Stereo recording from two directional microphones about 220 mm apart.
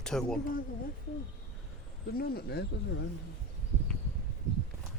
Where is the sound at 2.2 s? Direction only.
45° left (ahead or behind).